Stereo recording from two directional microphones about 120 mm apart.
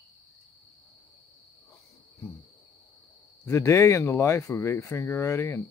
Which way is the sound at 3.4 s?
25° left (ahead or behind).